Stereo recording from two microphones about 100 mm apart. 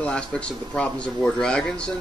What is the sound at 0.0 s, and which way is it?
Speech, 10° left (ahead or behind).